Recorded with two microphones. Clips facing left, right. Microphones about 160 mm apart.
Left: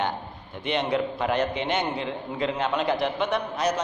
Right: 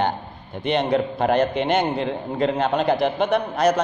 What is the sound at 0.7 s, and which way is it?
A man's voice, 40° right (ahead or behind).